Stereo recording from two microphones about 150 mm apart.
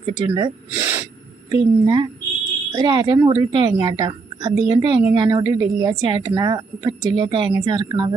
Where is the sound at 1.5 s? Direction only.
30° right (ahead or behind).